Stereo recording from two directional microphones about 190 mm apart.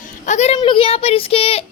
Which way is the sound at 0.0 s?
40° left (ahead or behind).